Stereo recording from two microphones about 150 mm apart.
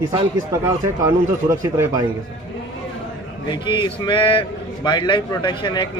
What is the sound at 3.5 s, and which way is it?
Speech, 30° left (ahead or behind).